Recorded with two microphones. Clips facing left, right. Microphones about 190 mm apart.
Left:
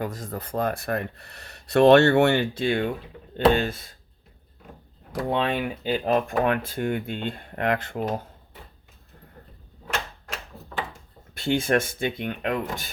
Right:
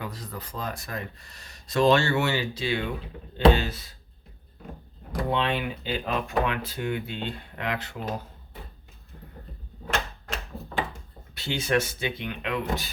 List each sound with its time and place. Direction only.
0.0 s speech: 45° left (ahead or behind)
5.3 s speech: 45° left (ahead or behind)
11.3 s speech: 50° left (ahead or behind)